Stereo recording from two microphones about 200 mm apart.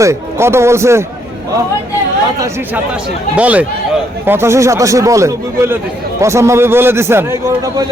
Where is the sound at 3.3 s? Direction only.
5° right (ahead or behind).